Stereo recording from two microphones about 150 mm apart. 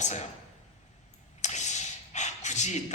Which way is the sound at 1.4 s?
50° left (ahead or behind).